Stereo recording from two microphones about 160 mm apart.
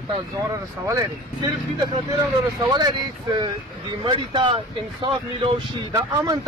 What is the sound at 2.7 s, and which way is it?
Speech, 25° right (ahead or behind).